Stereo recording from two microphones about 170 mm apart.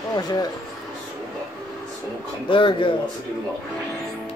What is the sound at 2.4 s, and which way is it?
Speech, 30° left (ahead or behind).